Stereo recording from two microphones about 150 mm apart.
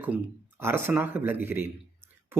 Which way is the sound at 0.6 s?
15° right (ahead or behind).